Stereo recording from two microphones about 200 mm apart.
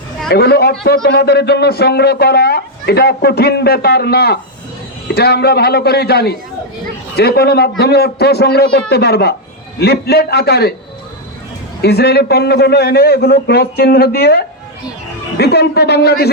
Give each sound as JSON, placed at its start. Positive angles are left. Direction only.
{"t": 0.3, "sound": "speech", "side_deg": 50}
{"t": 11.8, "sound": "speech", "side_deg": 55}